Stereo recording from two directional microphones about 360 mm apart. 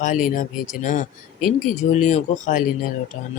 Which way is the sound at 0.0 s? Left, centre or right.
Left.